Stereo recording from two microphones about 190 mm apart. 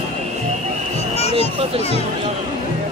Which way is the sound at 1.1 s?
30° left (ahead or behind).